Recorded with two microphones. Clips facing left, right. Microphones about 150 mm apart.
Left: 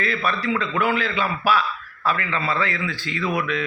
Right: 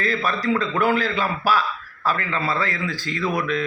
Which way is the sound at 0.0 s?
35° right (ahead or behind).